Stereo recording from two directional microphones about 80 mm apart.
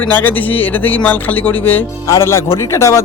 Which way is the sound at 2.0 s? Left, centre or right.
Left.